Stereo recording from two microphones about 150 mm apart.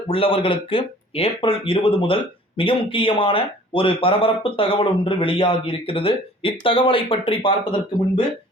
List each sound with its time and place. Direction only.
0.1 s speech: 35° left (ahead or behind)